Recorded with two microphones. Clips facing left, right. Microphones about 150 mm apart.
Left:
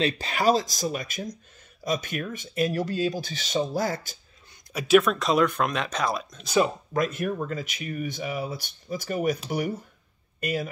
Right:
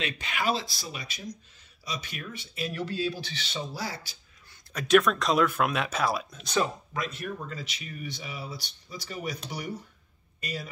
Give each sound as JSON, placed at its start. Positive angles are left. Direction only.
{"t": 0.0, "sound": "speech", "side_deg": 35}
{"t": 4.7, "sound": "speech", "side_deg": 5}
{"t": 6.9, "sound": "speech", "side_deg": 50}
{"t": 10.4, "sound": "speech", "side_deg": 55}